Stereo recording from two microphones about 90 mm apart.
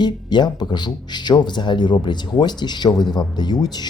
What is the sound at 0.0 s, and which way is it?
Speech, 55° left (ahead or behind).